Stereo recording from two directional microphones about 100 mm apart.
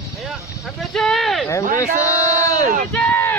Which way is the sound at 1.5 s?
30° left (ahead or behind).